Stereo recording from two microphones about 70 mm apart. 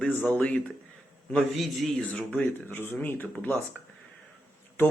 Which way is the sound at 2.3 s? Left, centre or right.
Left.